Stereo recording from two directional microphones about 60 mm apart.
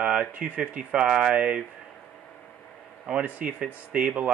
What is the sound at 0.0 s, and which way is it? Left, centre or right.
Speech, centre.